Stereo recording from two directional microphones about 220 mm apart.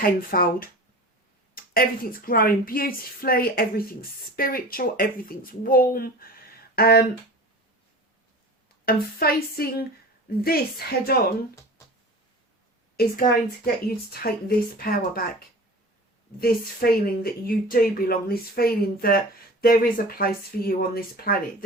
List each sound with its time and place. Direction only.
0.0 s speech: 40° left (ahead or behind)
8.8 s a woman's voice: 45° left (ahead or behind)
13.0 s a woman's voice: 40° left (ahead or behind)
16.4 s a woman's voice: 40° left (ahead or behind)